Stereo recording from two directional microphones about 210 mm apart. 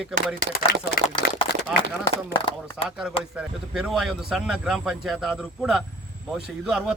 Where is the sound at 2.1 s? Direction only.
25° left (ahead or behind).